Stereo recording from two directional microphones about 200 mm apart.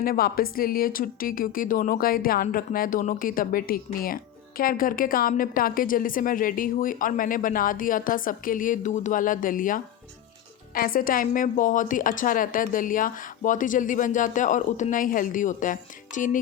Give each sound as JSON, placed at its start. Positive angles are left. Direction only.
{"t": 0.0, "sound": "a woman's voice", "side_deg": 45}